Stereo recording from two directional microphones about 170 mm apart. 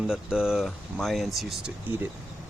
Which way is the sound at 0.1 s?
5° right (ahead or behind).